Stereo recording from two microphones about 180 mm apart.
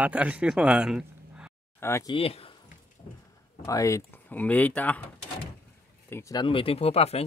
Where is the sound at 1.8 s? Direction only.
15° left (ahead or behind).